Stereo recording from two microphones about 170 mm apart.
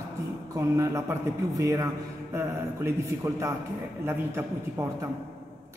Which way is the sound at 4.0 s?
15° right (ahead or behind).